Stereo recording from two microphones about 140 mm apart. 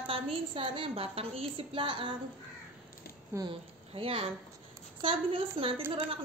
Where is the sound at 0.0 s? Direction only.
35° right (ahead or behind).